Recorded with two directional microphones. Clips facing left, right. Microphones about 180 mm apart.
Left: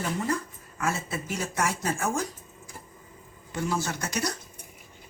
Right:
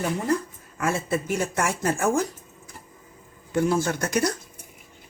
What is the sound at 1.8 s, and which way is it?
Speech, 60° right (ahead or behind).